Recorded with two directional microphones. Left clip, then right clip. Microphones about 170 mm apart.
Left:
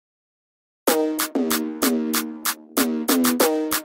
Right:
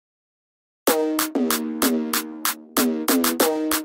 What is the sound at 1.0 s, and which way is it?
Music, centre (ahead or behind).